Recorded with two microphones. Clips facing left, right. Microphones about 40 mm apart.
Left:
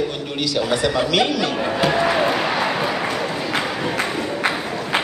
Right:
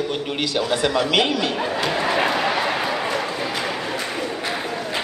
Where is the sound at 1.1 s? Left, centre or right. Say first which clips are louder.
Left 1 dB; right.